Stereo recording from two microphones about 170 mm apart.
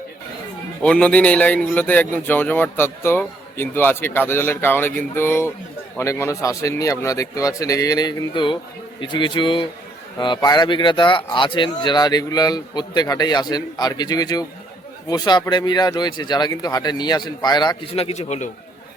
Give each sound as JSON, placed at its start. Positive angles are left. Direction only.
{"t": 0.8, "sound": "speech", "side_deg": 5}